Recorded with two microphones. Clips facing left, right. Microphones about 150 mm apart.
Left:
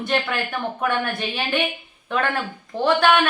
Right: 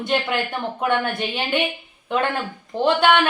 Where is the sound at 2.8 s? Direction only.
20° right (ahead or behind).